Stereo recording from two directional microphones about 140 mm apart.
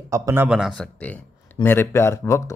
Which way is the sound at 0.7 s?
5° left (ahead or behind).